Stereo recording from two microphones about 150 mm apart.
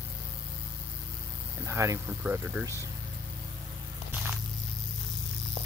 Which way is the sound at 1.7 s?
20° right (ahead or behind).